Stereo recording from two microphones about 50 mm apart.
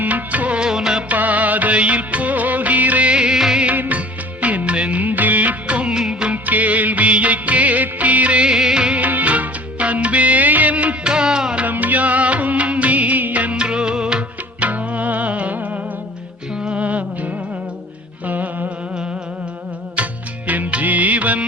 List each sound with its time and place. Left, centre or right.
0.0 s music: right
0.6 s music: centre
1.0 s music of bollywood: right; by 3.6 s centre
3.6 s music of bollywood: right
6.4 s music of bollywood: right; by 9.0 s centre
9.0 s music of bollywood: right; by 11.6 s centre
11.6 s music: right
13.6 s music of bollywood: centre
14.6 s music: right
16.6 s music: centre
16.8 s music: right
18.3 s music: right
20.0 s music: right
20.5 s music of bollywood: right